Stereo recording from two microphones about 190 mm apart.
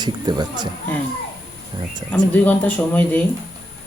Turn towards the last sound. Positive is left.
turn(degrees=10)  # may be behind; listen again after turning